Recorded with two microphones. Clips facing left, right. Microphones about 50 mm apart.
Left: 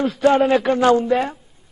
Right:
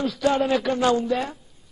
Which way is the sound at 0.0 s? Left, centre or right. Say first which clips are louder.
Left 6 dB; left.